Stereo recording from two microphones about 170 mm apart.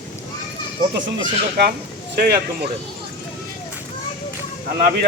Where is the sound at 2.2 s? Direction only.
65° right (ahead or behind).